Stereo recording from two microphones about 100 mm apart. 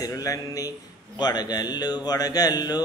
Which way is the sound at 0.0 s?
35° left (ahead or behind).